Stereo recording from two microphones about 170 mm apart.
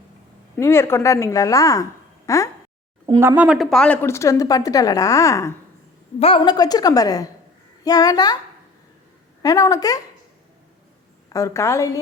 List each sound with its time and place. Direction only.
0.5 s a woman's voice: 15° left (ahead or behind)
3.2 s a woman's voice: 10° right (ahead or behind); by 5.5 s 20° left (ahead or behind)
6.1 s a woman's voice: 35° left (ahead or behind)
9.4 s a woman's voice: 20° left (ahead or behind)
11.3 s a woman's voice: 20° left (ahead or behind)